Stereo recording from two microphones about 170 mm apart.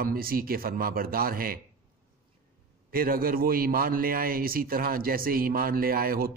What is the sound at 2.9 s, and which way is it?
A man's voice, 60° right (ahead or behind).